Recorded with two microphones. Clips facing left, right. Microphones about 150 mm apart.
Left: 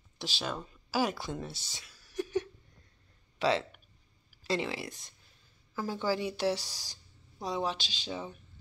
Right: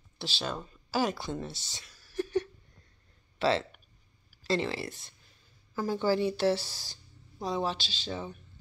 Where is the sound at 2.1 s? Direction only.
10° left (ahead or behind).